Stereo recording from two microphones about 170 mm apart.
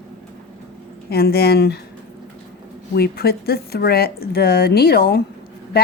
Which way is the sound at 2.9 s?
65° left (ahead or behind).